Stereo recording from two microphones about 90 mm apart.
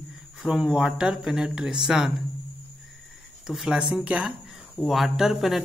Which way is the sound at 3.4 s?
10° right (ahead or behind).